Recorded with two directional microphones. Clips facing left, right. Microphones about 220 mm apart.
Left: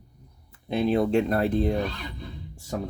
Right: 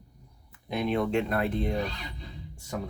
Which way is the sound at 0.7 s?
30° left (ahead or behind).